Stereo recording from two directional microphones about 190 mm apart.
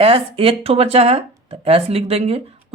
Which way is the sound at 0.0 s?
30° right (ahead or behind).